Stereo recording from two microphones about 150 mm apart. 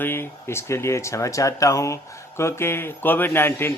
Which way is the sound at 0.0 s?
15° left (ahead or behind).